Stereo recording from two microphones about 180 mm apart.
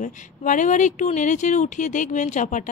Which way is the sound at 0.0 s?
45° left (ahead or behind).